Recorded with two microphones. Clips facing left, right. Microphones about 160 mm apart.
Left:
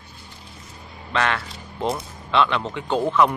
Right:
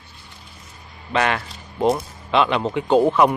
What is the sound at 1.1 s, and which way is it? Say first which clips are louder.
Speech: right 3 dB; 10° right (ahead or behind).